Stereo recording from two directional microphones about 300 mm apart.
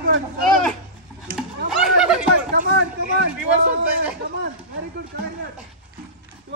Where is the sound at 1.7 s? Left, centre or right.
Centre.